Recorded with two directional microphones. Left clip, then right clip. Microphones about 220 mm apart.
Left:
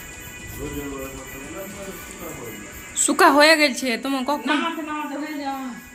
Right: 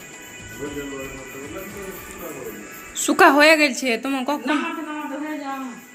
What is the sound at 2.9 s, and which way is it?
A woman's voice, centre (ahead or behind).